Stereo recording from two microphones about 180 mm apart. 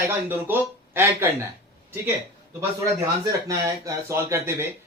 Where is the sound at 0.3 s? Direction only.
10° right (ahead or behind).